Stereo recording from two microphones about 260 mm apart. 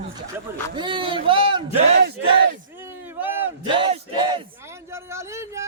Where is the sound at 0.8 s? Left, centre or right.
Centre.